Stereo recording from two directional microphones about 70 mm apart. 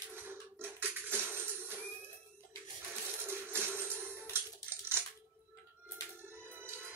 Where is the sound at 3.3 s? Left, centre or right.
Right.